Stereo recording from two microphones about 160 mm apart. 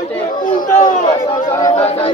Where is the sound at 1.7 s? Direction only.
40° left (ahead or behind).